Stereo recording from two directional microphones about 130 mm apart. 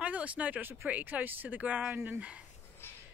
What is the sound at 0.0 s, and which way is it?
Speech, 10° right (ahead or behind).